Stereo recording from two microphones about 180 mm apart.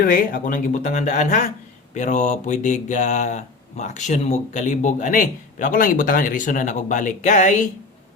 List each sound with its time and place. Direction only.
0.0 s speech: 50° left (ahead or behind)